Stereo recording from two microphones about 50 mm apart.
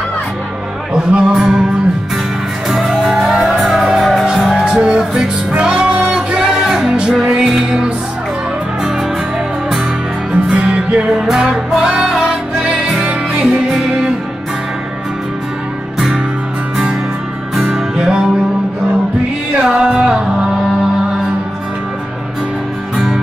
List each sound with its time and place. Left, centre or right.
0.9 s music: centre
2.7 s music: centre
10.3 s music: centre
11.1 s music: centre
17.6 s music: centre
19.6 s music: centre